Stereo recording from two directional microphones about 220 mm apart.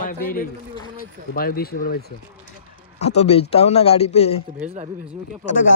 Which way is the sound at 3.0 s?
30° left (ahead or behind).